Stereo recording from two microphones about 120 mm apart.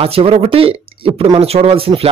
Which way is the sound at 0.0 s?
55° right (ahead or behind).